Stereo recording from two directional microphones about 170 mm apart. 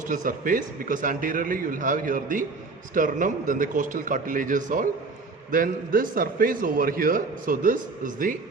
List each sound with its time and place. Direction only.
0.1 s a man's voice: 50° right (ahead or behind)